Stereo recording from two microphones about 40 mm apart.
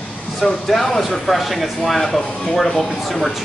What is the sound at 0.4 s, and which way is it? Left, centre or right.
Speech, centre.